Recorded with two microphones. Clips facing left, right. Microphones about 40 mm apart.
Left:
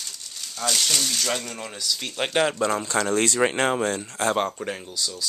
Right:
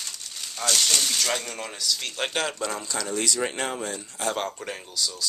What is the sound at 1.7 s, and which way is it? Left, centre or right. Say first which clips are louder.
Speech: left 2 dB; centre.